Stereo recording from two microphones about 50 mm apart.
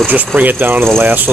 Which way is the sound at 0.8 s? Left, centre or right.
Right.